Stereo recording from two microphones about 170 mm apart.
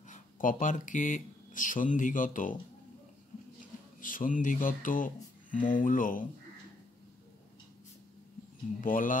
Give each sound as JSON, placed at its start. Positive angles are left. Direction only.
{"t": 0.1, "sound": "speech", "side_deg": 50}
{"t": 4.0, "sound": "speech", "side_deg": 55}
{"t": 8.8, "sound": "speech", "side_deg": 50}